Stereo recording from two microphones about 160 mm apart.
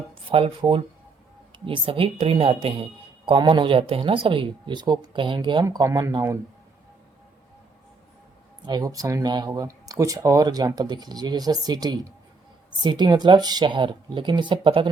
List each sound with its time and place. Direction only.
0.3 s a woman's voice: 35° right (ahead or behind)
8.6 s speech: 25° right (ahead or behind)